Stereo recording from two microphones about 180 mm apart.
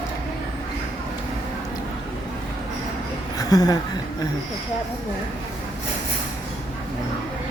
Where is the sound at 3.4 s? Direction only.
20° left (ahead or behind).